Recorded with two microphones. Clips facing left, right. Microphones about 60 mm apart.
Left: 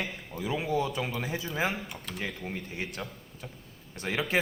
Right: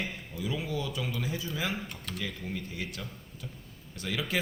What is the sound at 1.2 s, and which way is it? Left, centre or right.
Speech, left.